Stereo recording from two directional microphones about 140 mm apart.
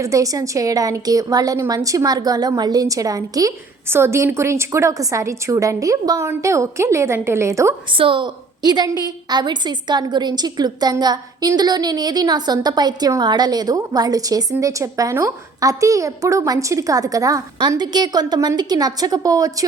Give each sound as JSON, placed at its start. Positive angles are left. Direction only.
{"t": 0.0, "sound": "a woman's voice", "side_deg": -25}
{"t": 7.9, "sound": "a woman's voice", "side_deg": -35}